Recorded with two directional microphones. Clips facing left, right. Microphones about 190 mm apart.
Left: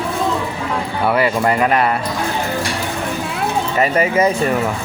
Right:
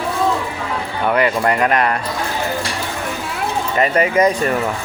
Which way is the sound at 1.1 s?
5° left (ahead or behind).